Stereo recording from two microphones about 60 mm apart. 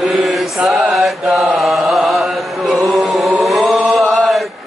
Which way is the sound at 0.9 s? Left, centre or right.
Centre.